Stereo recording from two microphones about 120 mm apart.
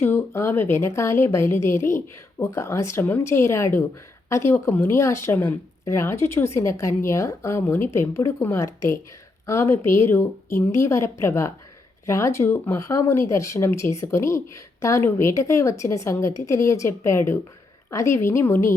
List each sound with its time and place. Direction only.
0.0 s speech: 20° left (ahead or behind)